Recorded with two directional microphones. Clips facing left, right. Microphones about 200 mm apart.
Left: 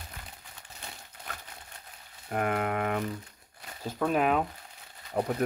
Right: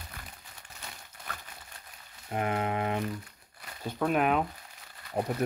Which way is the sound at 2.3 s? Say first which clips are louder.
Left 1 dB; 55° left (ahead or behind).